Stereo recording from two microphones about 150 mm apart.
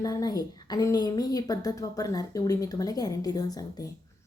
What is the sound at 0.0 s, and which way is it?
A woman's voice, 25° left (ahead or behind).